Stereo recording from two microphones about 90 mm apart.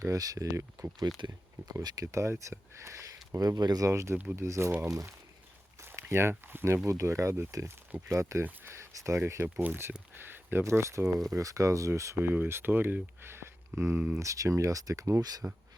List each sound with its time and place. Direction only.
0.0 s speech: 40° right (ahead or behind)
1.0 s speech: 55° right (ahead or behind)
1.7 s speech: 40° right (ahead or behind)
3.3 s speech: 45° right (ahead or behind)
3.8 s speech: 35° right (ahead or behind)
5.8 s speech: 25° right (ahead or behind)
10.2 s a sound: 25° right (ahead or behind)
10.6 s speech: 35° right (ahead or behind)